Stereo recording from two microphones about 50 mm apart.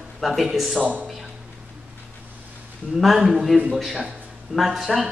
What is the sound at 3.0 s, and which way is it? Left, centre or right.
Speech, centre.